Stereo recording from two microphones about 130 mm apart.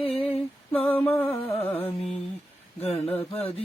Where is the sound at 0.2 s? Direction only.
10° left (ahead or behind).